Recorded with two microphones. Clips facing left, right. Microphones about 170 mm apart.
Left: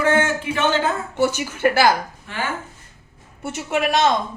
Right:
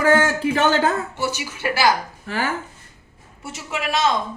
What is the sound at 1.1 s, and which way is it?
Speech, 55° left (ahead or behind).